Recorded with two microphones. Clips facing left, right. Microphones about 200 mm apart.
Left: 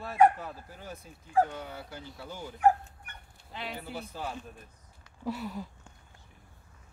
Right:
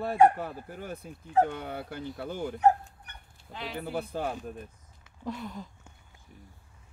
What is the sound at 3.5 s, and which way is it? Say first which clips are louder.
Speech: right 2 dB; centre (ahead or behind).